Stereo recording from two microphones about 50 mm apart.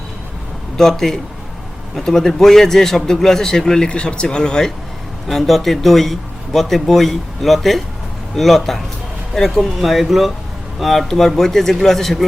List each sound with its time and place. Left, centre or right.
0.8 s a man's voice: centre
3.8 s speech: left
5.3 s speech: centre